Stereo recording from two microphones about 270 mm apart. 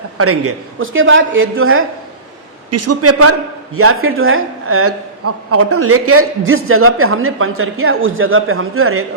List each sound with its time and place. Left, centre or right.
0.2 s a woman's voice: right
2.6 s a man's voice: right